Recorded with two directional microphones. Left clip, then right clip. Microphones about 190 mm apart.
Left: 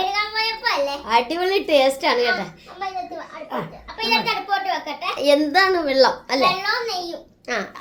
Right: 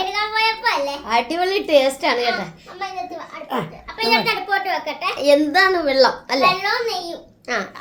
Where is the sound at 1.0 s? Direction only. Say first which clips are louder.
Even; 5° left (ahead or behind).